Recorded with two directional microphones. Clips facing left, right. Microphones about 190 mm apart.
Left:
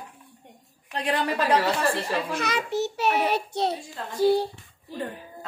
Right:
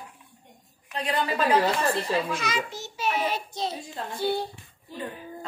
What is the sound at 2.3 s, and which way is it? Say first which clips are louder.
A child's voice: left 4 dB; 60° left (ahead or behind).